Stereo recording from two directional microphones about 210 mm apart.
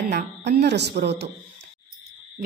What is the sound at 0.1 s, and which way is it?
A woman's voice, 50° right (ahead or behind).